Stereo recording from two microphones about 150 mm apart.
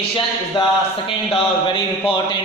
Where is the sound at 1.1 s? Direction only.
35° left (ahead or behind).